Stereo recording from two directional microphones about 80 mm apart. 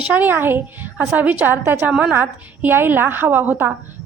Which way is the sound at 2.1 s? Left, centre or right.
Right.